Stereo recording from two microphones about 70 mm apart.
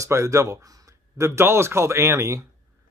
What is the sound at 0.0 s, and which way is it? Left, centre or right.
Speech, right.